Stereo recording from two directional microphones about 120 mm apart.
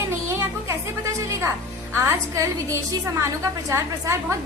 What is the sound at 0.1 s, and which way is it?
Music, 25° right (ahead or behind).